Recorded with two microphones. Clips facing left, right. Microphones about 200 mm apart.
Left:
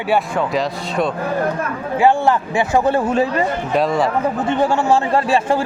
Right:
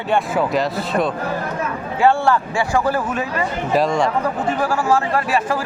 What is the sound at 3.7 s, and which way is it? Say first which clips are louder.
Speech: right 1 dB; centre (ahead or behind).